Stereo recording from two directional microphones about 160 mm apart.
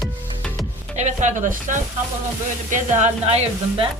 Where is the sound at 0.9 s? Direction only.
45° right (ahead or behind).